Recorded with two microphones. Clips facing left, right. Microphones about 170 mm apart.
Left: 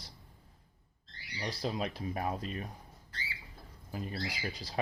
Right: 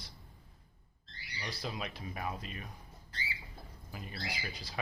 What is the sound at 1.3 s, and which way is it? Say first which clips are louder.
Speech: left 5 dB; 35° left (ahead or behind).